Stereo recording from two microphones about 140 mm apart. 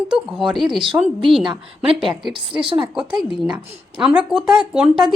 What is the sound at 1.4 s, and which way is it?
Speech, 35° right (ahead or behind).